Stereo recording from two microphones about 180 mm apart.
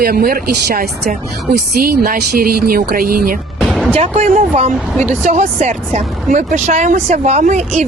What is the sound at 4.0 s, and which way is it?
Speech, 40° right (ahead or behind).